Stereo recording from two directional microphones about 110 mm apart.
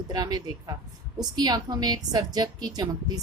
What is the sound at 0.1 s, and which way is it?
A woman's voice, 35° right (ahead or behind).